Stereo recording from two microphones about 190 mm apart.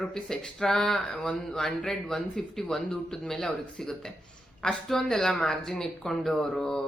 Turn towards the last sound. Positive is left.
turn(degrees=5)  # may be behind; listen again after turning